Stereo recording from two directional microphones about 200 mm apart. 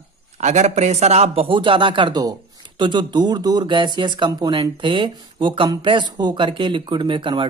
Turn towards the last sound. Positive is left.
turn(degrees=-25)  # may be behind; listen again after turning